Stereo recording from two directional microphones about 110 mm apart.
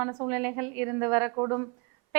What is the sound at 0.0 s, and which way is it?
A woman's voice, 20° right (ahead or behind).